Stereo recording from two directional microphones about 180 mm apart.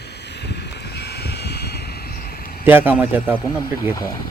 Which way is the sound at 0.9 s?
65° left (ahead or behind).